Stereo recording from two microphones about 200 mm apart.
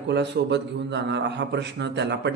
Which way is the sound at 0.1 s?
60° right (ahead or behind).